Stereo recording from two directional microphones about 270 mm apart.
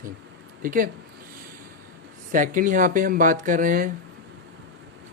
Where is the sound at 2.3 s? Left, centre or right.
Right.